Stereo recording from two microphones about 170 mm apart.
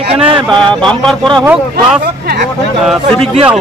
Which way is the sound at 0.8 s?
5° left (ahead or behind).